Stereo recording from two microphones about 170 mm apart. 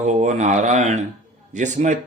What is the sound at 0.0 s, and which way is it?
Speech, 45° right (ahead or behind).